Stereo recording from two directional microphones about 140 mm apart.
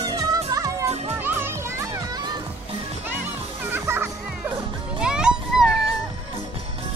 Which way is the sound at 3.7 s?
15° right (ahead or behind).